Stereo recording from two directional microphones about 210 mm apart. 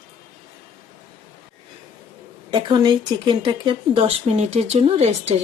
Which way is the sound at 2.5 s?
20° right (ahead or behind).